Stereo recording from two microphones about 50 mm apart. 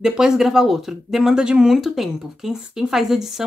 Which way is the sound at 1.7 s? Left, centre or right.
Centre.